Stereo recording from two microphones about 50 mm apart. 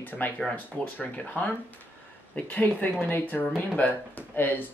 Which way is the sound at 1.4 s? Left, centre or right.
Left.